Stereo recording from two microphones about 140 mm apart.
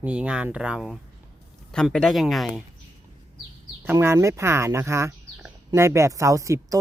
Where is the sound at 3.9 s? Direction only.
20° right (ahead or behind).